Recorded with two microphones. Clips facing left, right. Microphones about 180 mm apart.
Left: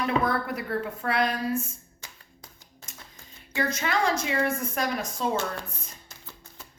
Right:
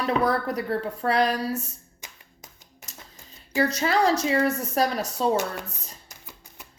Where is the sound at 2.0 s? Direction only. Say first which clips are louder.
Right 2 dB; 15° right (ahead or behind).